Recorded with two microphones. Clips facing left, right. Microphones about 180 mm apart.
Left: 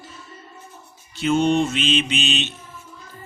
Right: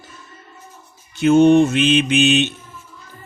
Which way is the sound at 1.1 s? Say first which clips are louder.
Right 7 dB; 50° right (ahead or behind).